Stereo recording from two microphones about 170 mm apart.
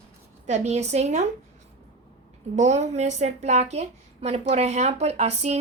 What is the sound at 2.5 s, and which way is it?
A woman's voice, 45° right (ahead or behind).